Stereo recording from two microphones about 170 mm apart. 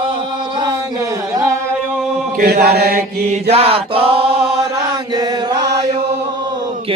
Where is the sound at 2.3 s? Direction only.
65° right (ahead or behind).